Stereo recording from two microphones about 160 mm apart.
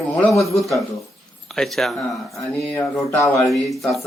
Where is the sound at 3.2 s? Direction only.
15° left (ahead or behind).